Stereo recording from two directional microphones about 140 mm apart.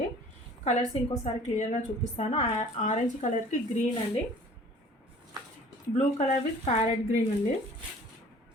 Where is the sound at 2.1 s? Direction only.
50° left (ahead or behind).